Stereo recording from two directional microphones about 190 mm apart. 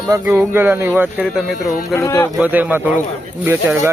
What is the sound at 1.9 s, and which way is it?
Speech, 15° left (ahead or behind).